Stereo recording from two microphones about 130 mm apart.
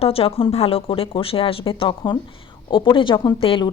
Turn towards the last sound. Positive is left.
turn(degrees=45)  # may be behind; listen again after turning